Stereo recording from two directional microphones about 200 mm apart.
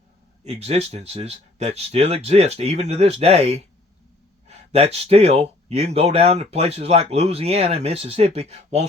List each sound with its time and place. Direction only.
0.4 s speech: 30° right (ahead or behind)